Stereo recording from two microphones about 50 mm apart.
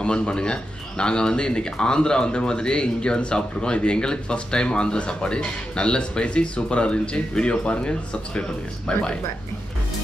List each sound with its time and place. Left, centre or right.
0.0 s speech: centre